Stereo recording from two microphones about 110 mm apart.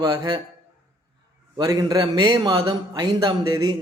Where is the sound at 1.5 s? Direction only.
35° right (ahead or behind).